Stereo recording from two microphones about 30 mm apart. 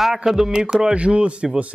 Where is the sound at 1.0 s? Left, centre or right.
Right.